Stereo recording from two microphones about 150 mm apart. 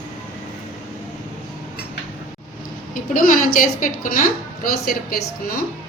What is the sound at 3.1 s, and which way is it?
A woman's voice, 65° left (ahead or behind).